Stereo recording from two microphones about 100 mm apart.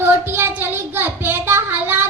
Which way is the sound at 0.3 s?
25° right (ahead or behind).